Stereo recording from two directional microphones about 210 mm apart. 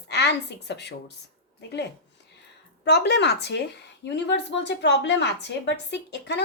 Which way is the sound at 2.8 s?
50° left (ahead or behind).